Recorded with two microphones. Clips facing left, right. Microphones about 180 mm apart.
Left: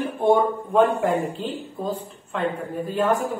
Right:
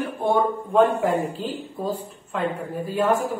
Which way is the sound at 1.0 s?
5° right (ahead or behind).